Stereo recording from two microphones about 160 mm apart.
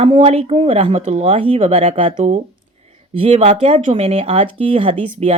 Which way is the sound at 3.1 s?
40° right (ahead or behind).